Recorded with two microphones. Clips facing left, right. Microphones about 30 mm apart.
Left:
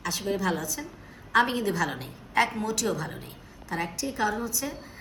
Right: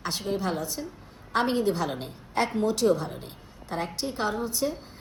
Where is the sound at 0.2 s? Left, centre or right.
Left.